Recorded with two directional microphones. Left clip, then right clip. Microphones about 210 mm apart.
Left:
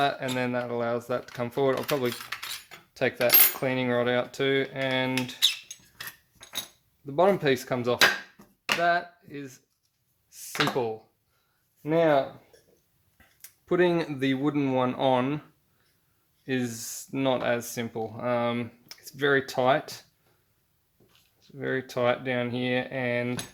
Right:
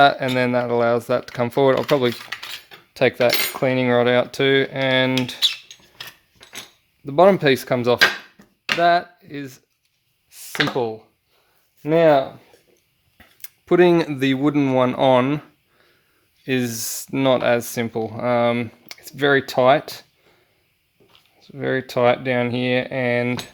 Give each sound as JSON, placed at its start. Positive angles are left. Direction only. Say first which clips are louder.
{"t": 0.0, "sound": "cutlery", "louder": "right 11 dB", "side_deg": -50}
{"t": 2.9, "sound": "cutlery", "louder": "right 8 dB", "side_deg": -40}
{"t": 7.0, "sound": "cutlery", "louder": "right 9 dB", "side_deg": -45}
{"t": 8.8, "sound": "speech", "louder": "right 10 dB", "side_deg": -45}
{"t": 10.2, "sound": "a sound", "louder": "right 4 dB", "side_deg": -45}
{"t": 11.8, "sound": "cutlery", "louder": "right 8 dB", "side_deg": -45}
{"t": 13.1, "sound": "speech", "louder": "right 9 dB", "side_deg": -50}
{"t": 16.5, "sound": "speech", "louder": "right 8 dB", "side_deg": -45}
{"t": 21.5, "sound": "cutlery", "louder": "right 8 dB", "side_deg": -45}